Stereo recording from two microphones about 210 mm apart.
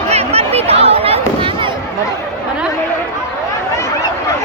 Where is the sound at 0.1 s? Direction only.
30° right (ahead or behind).